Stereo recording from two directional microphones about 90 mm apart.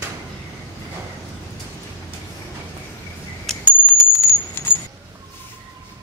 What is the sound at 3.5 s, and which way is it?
Bicycle bell, 5° left (ahead or behind).